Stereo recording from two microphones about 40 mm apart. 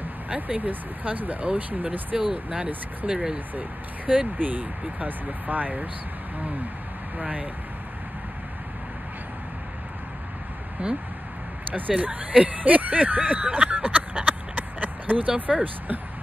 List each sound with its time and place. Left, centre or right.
0.3 s speech: right
2.3 s speech: right
3.5 s speech: right
7.2 s speech: right
10.8 s speech: right
12.0 s speech: right